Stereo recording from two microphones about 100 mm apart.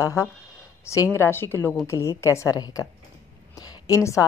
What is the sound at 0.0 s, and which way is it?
A woman's voice, 30° left (ahead or behind).